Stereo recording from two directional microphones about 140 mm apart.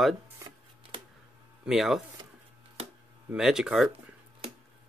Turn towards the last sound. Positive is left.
turn(degrees=-5)  # may be behind; listen again after turning